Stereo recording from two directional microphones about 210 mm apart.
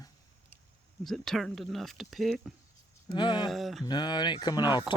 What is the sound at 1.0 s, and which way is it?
Speech, centre (ahead or behind).